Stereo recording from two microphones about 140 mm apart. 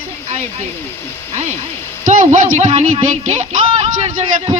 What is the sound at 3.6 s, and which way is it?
Speech, 45° right (ahead or behind).